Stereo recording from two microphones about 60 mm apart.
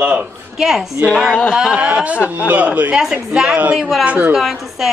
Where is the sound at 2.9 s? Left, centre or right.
Centre.